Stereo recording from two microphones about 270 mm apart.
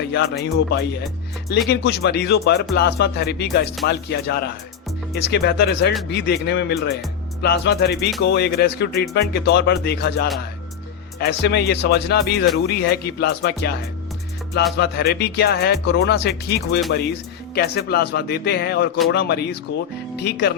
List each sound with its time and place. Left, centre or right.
0.1 s speech: left